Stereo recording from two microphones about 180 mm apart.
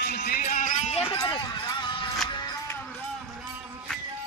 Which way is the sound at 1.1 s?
25° left (ahead or behind).